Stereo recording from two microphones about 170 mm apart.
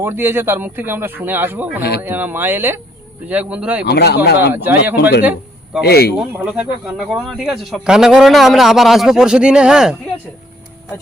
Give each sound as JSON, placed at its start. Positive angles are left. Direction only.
{"t": 0.0, "sound": "speech", "side_deg": -15}
{"t": 3.8, "sound": "speech", "side_deg": 70}
{"t": 4.5, "sound": "speech", "side_deg": -10}
{"t": 5.8, "sound": "speech", "side_deg": 70}
{"t": 6.1, "sound": "speech", "side_deg": -10}